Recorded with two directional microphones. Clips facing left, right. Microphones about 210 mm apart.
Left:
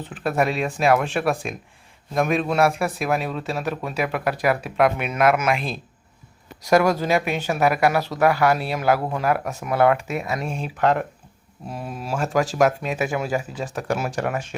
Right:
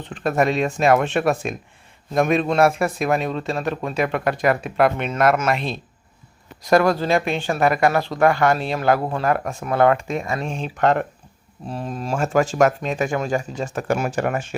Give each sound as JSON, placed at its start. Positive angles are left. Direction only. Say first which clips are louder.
{"t": 0.0, "sound": "speech", "louder": "right 2 dB", "side_deg": 5}